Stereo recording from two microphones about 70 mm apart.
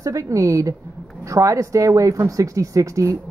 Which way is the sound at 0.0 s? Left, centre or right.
Right.